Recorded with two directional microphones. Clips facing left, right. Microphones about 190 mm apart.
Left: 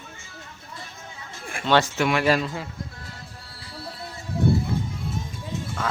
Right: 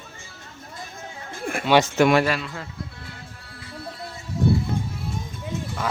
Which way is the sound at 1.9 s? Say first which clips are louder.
Right 6 dB; 45° right (ahead or behind).